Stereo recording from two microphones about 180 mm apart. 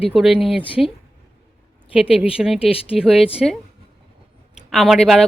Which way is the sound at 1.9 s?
5° right (ahead or behind).